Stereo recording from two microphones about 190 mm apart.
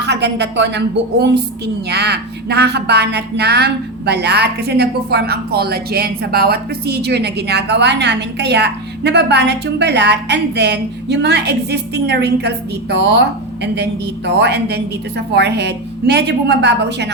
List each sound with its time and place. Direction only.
0.0 s a woman's voice: 65° right (ahead or behind)